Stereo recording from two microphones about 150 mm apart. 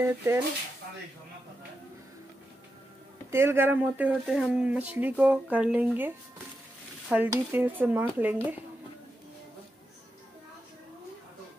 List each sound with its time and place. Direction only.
0.0 s speech: 15° right (ahead or behind)
3.3 s speech: 15° right (ahead or behind)
7.2 s speech: 15° right (ahead or behind)